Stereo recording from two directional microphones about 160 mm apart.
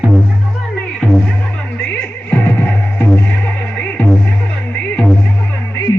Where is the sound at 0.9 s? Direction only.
Centre (ahead or behind).